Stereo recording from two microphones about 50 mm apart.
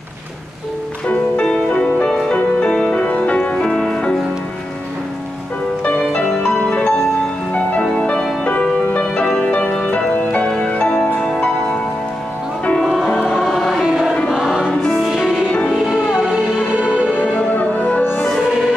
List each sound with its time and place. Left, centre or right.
1.0 s music: left
3.8 s music: centre
5.9 s music: centre
10.5 s music: centre
11.1 s music: centre
12.8 s music: centre
13.8 s choir: centre
14.7 s music: centre
15.0 s music: centre
17.2 s music: left